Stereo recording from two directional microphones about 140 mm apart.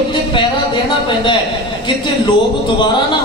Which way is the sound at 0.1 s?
35° left (ahead or behind).